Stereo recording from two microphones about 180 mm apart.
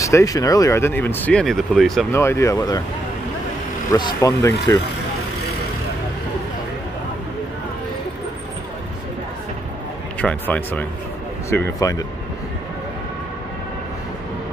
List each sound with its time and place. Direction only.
0.0 s speech: 20° left (ahead or behind); by 2.0 s centre (ahead or behind)
2.1 s speech: 15° left (ahead or behind)
3.9 s speech: 20° left (ahead or behind)
10.2 s speech: 10° left (ahead or behind)